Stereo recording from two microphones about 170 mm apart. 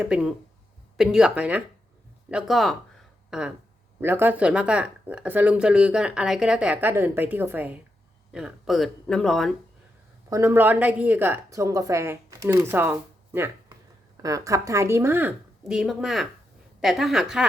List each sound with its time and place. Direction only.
0.0 s speech: 5° right (ahead or behind)
10.2 s speech: 20° right (ahead or behind)